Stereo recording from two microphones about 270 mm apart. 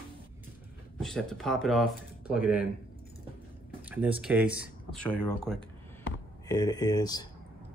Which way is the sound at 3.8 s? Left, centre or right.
Centre.